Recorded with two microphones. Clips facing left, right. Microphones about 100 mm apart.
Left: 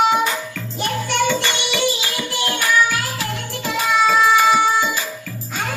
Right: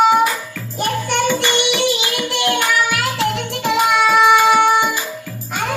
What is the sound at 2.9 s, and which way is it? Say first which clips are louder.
Music: right 6 dB; 75° right (ahead or behind).